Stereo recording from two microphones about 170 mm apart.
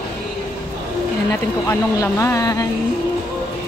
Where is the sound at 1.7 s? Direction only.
15° left (ahead or behind).